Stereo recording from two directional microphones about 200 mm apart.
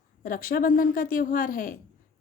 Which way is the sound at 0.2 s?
45° left (ahead or behind).